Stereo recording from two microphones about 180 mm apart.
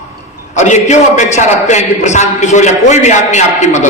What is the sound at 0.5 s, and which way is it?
A man's voice, 40° left (ahead or behind).